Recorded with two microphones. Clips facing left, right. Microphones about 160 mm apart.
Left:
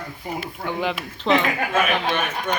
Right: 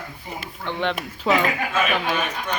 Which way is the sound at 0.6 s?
5° left (ahead or behind).